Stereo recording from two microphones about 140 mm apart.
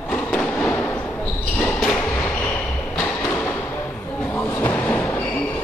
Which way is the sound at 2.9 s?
10° left (ahead or behind).